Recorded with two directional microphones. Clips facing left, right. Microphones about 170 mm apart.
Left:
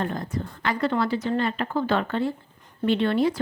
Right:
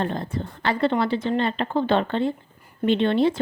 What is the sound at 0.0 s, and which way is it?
Speech, 30° right (ahead or behind).